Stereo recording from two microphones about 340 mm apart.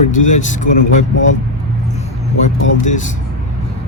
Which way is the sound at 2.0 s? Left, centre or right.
Left.